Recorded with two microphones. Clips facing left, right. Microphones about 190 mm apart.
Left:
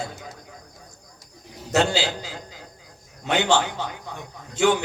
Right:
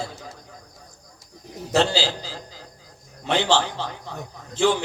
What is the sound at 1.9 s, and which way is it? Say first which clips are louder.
A man's voice: even; 30° right (ahead or behind).